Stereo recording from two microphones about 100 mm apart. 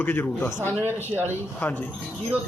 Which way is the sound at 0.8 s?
20° right (ahead or behind).